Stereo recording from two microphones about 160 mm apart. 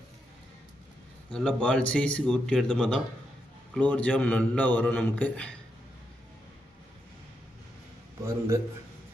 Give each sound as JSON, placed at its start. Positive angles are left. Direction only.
{"t": 1.3, "sound": "a man's voice", "side_deg": 5}
{"t": 8.3, "sound": "a man's voice", "side_deg": -15}